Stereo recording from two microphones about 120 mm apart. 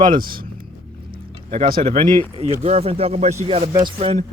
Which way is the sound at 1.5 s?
50° right (ahead or behind).